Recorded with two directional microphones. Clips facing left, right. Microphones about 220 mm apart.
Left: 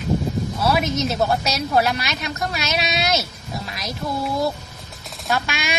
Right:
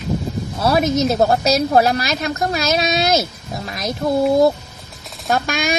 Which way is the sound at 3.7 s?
45° right (ahead or behind).